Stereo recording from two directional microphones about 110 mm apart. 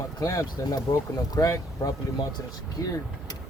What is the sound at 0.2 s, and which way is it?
Speech, 35° left (ahead or behind).